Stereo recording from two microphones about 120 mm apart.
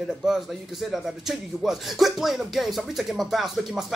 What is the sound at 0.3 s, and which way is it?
Speech, 5° right (ahead or behind).